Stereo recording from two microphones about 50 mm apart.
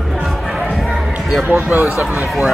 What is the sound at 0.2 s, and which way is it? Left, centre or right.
Music, centre.